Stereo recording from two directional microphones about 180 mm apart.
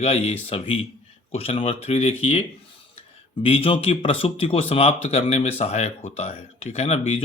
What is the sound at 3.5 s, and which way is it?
Speech, 30° left (ahead or behind).